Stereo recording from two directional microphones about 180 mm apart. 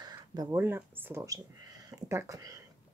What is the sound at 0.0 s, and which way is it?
Speech, 20° right (ahead or behind).